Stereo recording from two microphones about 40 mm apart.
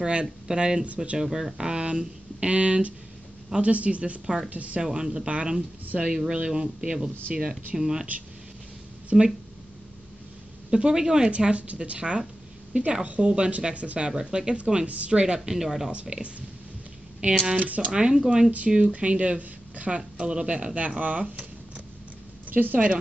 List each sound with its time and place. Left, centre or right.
0.0 s speech: right
1.9 s speech: right
5.0 s speech: right
9.1 s speech: centre
10.7 s speech: centre
11.3 s speech: right
13.0 s speech: right
15.5 s speech: centre
16.1 s speech: right
17.9 s speech: right
18.8 s speech: right
22.5 s speech: right